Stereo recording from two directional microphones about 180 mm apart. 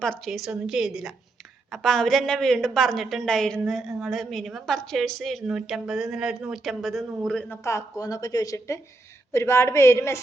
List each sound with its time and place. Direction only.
0.0 s a woman's voice: 5° left (ahead or behind)